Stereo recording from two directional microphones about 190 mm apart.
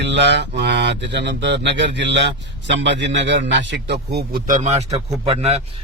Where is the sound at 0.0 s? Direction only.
65° right (ahead or behind).